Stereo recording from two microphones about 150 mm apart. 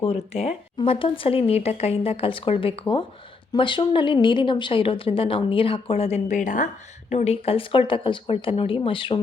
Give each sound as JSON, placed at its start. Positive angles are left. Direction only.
{"t": 0.0, "sound": "speech", "side_deg": 40}
{"t": 7.1, "sound": "speech", "side_deg": 45}